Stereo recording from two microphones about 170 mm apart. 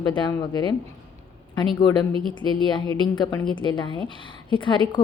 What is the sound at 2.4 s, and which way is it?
A woman's voice, 25° left (ahead or behind).